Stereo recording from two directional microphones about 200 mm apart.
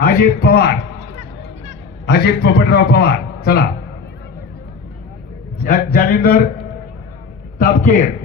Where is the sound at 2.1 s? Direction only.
55° left (ahead or behind).